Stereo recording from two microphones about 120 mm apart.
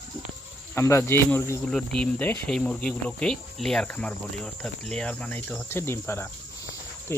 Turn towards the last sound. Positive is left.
turn(degrees=20)  # may be behind; listen again after turning